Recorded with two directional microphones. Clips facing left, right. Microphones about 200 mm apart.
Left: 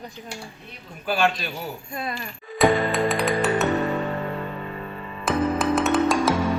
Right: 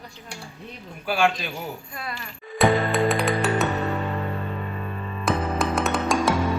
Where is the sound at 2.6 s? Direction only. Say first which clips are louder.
Even; centre (ahead or behind).